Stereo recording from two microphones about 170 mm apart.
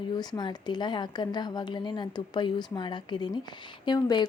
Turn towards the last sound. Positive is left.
turn(degrees=25)  # may be behind; listen again after turning